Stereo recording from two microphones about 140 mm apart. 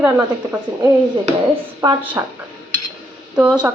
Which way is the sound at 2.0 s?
10° right (ahead or behind).